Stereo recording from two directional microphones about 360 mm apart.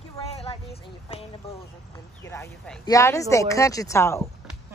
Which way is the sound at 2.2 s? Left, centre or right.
Centre.